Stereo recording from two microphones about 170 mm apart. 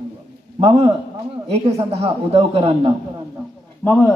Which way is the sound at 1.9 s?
35° right (ahead or behind).